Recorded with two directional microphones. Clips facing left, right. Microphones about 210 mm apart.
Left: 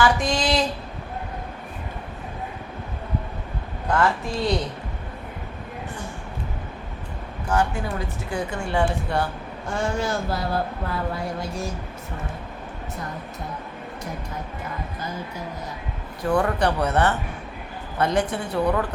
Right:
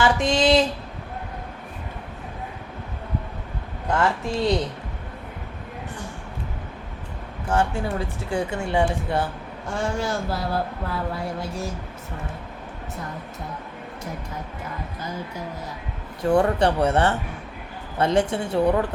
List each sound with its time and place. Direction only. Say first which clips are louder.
0.0 s a sound: right 2 dB; 25° right (ahead or behind)
3.8 s speech: left 1 dB; 25° right (ahead or behind)
7.4 s speech: right 1 dB; 30° right (ahead or behind)
9.2 s speech: left 1 dB; centre (ahead or behind)
16.2 s speech: right 3 dB; 25° right (ahead or behind)